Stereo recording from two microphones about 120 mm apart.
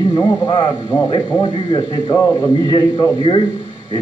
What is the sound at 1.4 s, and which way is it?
A man's voice, 45° left (ahead or behind).